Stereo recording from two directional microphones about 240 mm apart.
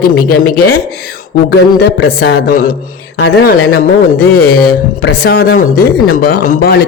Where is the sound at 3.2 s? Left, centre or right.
Left.